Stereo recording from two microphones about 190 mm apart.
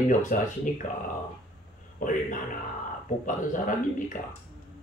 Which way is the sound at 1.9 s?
45° left (ahead or behind).